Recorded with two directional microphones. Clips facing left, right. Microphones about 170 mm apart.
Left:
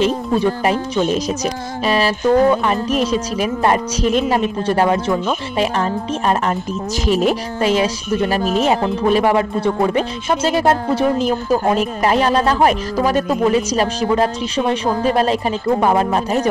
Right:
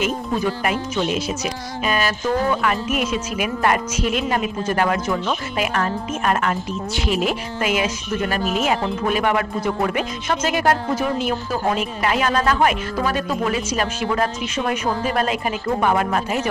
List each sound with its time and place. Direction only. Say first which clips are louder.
0.7 s speech: left 5 dB; 40° left (ahead or behind)